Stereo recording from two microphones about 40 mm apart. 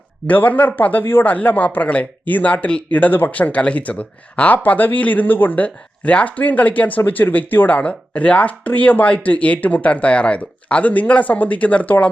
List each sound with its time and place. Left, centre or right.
0.3 s speech: left
1.2 s speech: left
3.1 s speech: left
3.3 s speech: left
7.8 s speech: left